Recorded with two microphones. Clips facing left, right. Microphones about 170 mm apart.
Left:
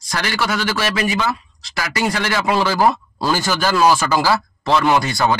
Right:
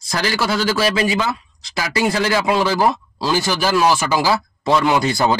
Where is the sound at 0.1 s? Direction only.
30° right (ahead or behind).